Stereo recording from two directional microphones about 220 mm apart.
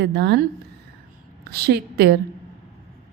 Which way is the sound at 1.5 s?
45° right (ahead or behind).